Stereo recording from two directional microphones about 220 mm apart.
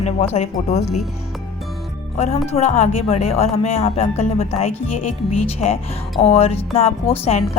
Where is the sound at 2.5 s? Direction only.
30° left (ahead or behind).